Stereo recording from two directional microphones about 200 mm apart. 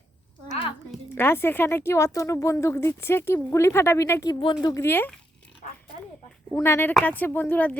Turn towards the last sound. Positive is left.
turn(degrees=10)  # may be behind; listen again after turning